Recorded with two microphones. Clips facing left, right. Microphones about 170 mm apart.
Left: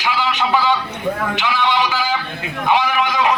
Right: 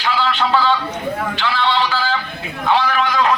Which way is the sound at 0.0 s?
15° left (ahead or behind).